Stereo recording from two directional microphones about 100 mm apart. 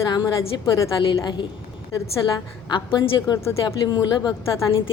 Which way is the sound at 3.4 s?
30° left (ahead or behind).